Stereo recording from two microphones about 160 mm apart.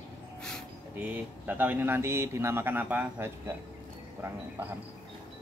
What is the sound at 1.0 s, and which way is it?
Speech, 10° right (ahead or behind).